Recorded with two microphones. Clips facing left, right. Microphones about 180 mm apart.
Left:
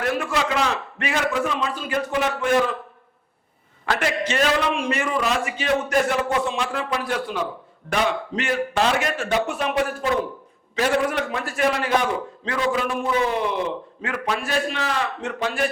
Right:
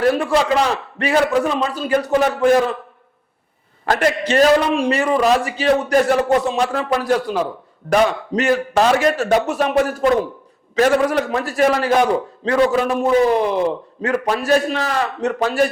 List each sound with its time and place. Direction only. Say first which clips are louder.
0.0 s a man's voice: right 7 dB; 35° right (ahead or behind)
3.8 s a man's voice: right 6 dB; 45° right (ahead or behind)